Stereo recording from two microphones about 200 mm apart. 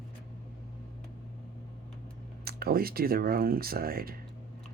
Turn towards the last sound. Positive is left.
turn(degrees=-50)  # may be behind; listen again after turning